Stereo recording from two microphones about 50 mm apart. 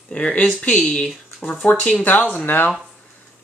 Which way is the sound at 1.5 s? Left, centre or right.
Left.